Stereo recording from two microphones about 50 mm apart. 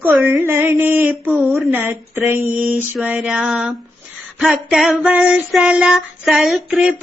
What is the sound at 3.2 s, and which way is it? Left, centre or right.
Speech, centre.